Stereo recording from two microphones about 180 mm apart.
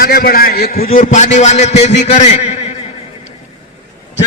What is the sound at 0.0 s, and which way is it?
A man's voice, 55° left (ahead or behind).